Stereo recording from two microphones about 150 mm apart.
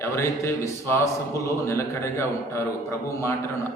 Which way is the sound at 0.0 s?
20° left (ahead or behind).